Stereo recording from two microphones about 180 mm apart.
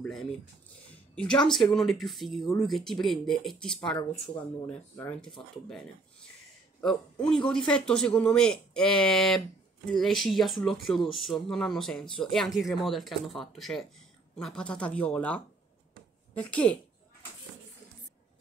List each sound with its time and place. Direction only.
1.1 s speech: 5° left (ahead or behind)
6.8 s speech: 5° left (ahead or behind)